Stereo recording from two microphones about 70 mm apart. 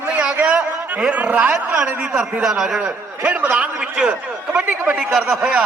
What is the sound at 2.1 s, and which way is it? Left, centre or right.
Speech, centre.